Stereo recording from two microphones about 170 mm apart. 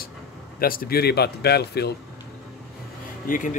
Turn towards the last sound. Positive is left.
turn(degrees=50)  # may be behind; listen again after turning